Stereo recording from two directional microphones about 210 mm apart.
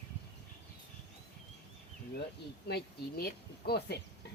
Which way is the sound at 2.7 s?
50° left (ahead or behind).